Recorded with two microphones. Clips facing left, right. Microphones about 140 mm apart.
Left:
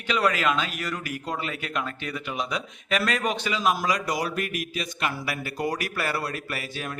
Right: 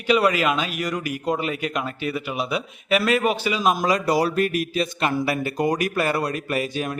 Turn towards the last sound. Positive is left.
turn(degrees=-20)  # may be behind; listen again after turning